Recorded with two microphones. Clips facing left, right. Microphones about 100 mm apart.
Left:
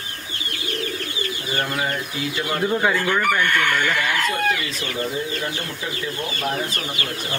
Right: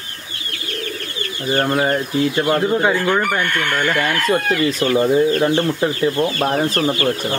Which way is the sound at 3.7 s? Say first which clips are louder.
Right 3 dB; 45° right (ahead or behind).